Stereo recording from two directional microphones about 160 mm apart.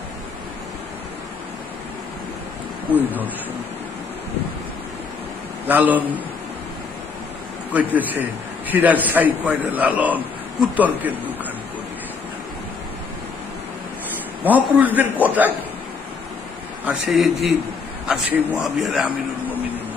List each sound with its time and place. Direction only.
5.6 s a man's voice: 10° right (ahead or behind)
7.7 s a man's voice: 10° right (ahead or behind)
14.4 s a man's voice: 10° right (ahead or behind)
16.8 s a man's voice: centre (ahead or behind)